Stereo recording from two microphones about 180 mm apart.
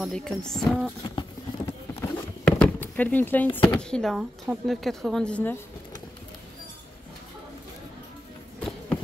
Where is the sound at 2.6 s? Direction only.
10° left (ahead or behind).